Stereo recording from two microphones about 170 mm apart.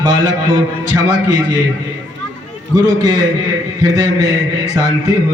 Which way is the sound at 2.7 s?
20° right (ahead or behind).